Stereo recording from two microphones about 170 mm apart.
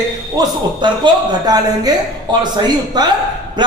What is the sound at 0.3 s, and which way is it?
Speech, 25° right (ahead or behind).